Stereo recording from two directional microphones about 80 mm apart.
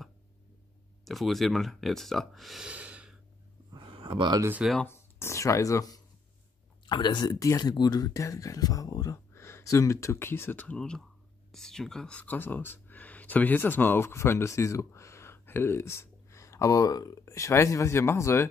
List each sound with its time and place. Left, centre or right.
1.0 s speech: centre
2.6 s gasp: centre
3.7 s a sound: right
4.8 s speech: left
6.9 s speech: left
7.3 s speech: left
10.8 s speech: centre
12.2 s speech: left